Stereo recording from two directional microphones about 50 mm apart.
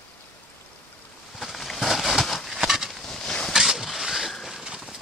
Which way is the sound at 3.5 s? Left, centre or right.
Centre.